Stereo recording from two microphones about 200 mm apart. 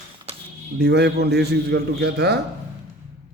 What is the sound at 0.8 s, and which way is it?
A man's voice, 55° right (ahead or behind).